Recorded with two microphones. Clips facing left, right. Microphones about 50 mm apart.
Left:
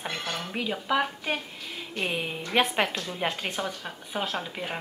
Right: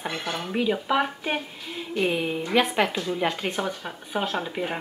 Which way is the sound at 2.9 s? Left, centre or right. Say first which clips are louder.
Right 4 dB; centre.